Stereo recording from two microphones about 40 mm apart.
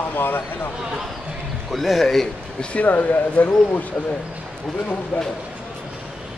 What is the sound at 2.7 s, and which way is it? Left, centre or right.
Speech, left.